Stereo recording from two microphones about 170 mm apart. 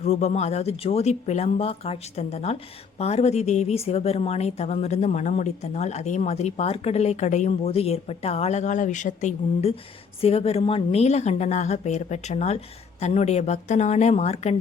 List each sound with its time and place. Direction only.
0.0 s speech: 40° left (ahead or behind)